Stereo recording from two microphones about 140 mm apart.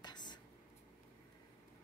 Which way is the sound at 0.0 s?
30° left (ahead or behind).